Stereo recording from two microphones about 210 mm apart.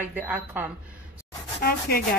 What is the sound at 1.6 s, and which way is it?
Speech, 45° left (ahead or behind).